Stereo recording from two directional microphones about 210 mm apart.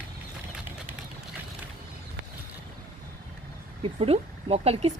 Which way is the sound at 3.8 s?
30° right (ahead or behind).